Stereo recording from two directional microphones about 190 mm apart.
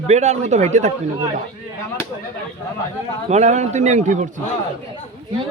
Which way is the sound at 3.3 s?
35° right (ahead or behind).